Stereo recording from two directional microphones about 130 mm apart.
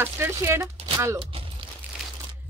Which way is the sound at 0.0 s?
15° right (ahead or behind).